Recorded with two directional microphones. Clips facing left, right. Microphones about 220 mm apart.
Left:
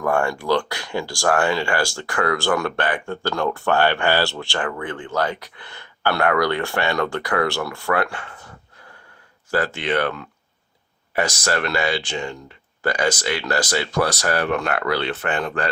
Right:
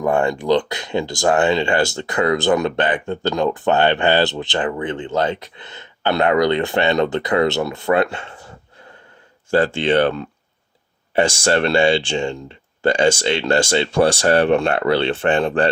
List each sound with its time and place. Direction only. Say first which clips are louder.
0.0 s speech: right 3 dB; 20° right (ahead or behind)
9.5 s speech: right 6 dB; 30° right (ahead or behind)